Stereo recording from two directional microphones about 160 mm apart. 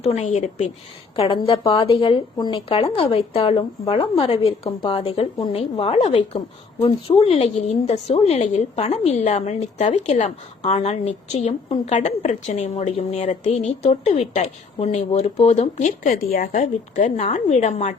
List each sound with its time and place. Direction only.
0.0 s a woman's voice: 40° left (ahead or behind)
1.1 s a woman's voice: 35° left (ahead or behind)
4.6 s a woman's voice: 20° left (ahead or behind)
4.9 s a woman's voice: 40° left (ahead or behind)
16.3 s a woman's voice: 55° left (ahead or behind)